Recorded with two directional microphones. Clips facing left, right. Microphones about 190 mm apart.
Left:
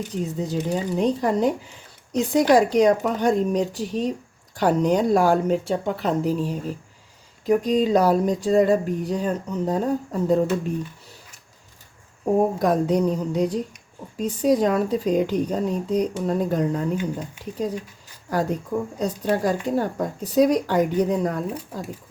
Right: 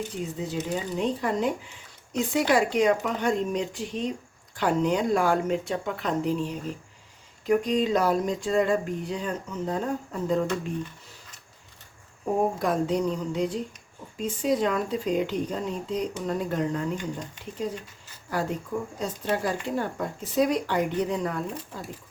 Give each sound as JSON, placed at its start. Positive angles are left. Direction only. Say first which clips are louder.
{"t": 0.3, "sound": "speech", "louder": "left 5 dB", "side_deg": 40}
{"t": 12.5, "sound": "speech", "louder": "left 5 dB", "side_deg": 40}
{"t": 16.9, "sound": "speech", "louder": "left 5 dB", "side_deg": 5}
{"t": 18.3, "sound": "speech", "louder": "left 5 dB", "side_deg": 40}